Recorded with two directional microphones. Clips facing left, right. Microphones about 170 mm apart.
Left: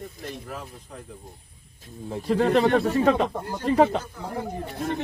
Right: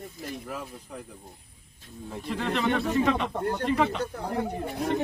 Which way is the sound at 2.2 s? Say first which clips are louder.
Left 8 dB; 40° left (ahead or behind).